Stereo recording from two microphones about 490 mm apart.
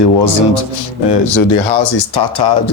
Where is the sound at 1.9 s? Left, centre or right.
Left.